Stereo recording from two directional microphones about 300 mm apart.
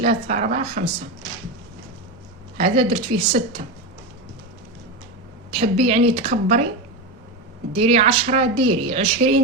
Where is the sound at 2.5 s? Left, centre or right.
Centre.